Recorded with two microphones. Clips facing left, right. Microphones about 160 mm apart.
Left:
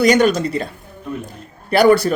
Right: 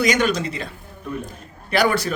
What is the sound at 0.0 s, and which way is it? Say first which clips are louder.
Speech: left 6 dB; 35° left (ahead or behind).